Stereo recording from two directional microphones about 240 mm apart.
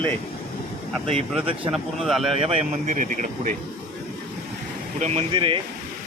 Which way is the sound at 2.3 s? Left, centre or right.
Right.